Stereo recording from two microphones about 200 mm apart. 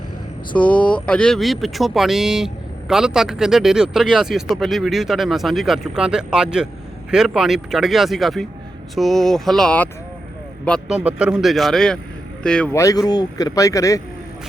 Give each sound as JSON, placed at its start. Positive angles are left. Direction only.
{"t": 0.5, "sound": "speech", "side_deg": 5}